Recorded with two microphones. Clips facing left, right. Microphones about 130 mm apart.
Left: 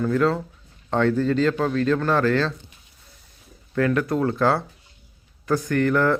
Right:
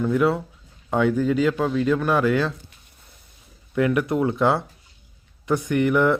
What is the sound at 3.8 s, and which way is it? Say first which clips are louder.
Speech: right 1 dB; 15° right (ahead or behind).